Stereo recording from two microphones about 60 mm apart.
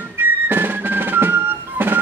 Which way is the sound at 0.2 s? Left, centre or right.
Right.